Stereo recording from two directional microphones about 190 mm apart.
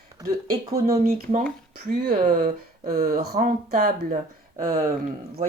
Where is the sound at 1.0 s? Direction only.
40° right (ahead or behind).